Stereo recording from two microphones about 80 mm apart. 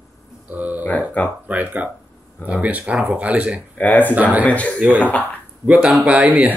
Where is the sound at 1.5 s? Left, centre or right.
Centre.